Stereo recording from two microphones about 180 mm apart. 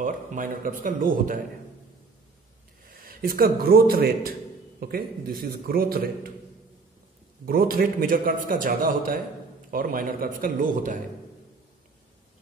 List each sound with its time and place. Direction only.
0.0 s a man's voice: 45° right (ahead or behind)
2.9 s a man's voice: 55° right (ahead or behind)
7.4 s a man's voice: 55° right (ahead or behind)